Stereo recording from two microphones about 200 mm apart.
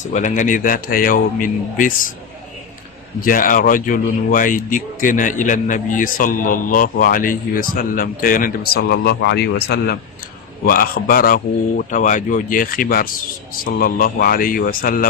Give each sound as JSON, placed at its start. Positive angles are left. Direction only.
{"t": 0.0, "sound": "speech", "side_deg": 35}
{"t": 3.2, "sound": "speech", "side_deg": 45}